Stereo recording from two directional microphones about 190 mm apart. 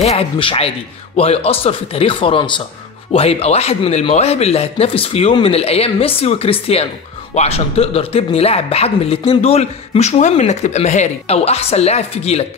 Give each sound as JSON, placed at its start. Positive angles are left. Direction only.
{"t": 0.0, "sound": "speech", "side_deg": 30}